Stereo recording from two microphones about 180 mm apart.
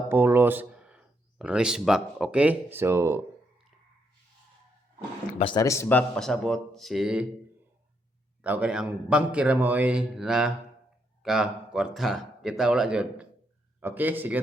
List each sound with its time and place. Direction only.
0.1 s speech: 10° right (ahead or behind)
5.4 s speech: 30° left (ahead or behind)
5.6 s a man's voice: 15° left (ahead or behind); by 7.3 s 5° right (ahead or behind)
8.4 s a man's voice: 5° right (ahead or behind)